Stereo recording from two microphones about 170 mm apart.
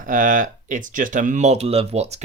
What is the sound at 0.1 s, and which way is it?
Speech, 50° right (ahead or behind).